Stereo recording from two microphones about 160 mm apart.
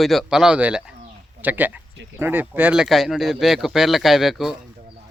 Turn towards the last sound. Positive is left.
turn(degrees=0)  # may be behind; listen again after turning